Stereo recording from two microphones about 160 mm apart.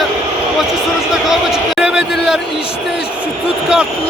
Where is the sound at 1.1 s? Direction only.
5° right (ahead or behind).